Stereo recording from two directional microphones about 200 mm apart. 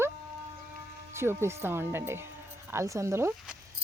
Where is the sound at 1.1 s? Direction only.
10° right (ahead or behind).